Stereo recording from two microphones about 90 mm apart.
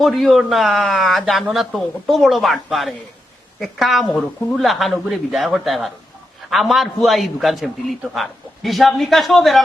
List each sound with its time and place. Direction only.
0.0 s a man's voice: centre (ahead or behind)